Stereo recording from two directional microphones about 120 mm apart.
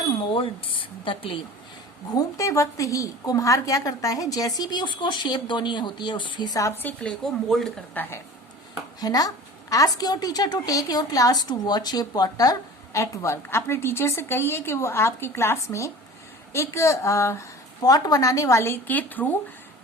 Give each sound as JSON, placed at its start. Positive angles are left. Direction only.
{"t": 0.3, "sound": "speech", "side_deg": 45}
{"t": 2.0, "sound": "a woman's voice", "side_deg": 30}
{"t": 6.8, "sound": "speech", "side_deg": 5}
{"t": 8.0, "sound": "speech", "side_deg": 15}
{"t": 9.0, "sound": "a woman's voice", "side_deg": 30}